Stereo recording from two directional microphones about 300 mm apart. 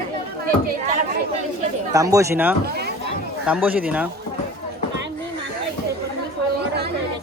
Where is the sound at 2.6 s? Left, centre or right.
Right.